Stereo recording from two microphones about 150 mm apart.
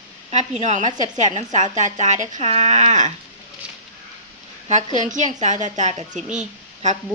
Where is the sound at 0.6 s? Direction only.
50° right (ahead or behind).